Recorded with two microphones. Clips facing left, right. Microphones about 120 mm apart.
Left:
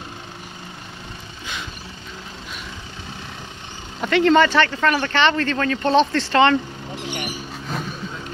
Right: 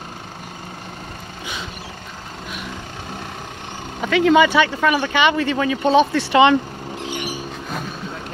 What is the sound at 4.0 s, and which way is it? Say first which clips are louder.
Speech: right 1 dB; centre (ahead or behind).